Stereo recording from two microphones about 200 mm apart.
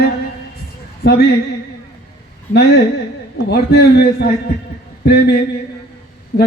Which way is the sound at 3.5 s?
55° left (ahead or behind).